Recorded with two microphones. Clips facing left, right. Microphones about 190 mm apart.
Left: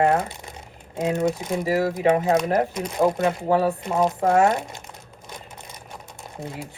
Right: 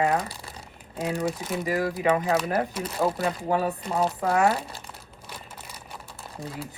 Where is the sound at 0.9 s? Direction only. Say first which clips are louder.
Left 5 dB; 20° left (ahead or behind).